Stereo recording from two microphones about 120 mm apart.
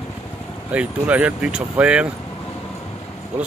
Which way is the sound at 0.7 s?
10° right (ahead or behind).